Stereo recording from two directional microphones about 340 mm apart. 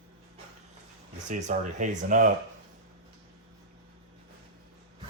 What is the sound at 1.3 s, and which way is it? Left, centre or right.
Speech, right.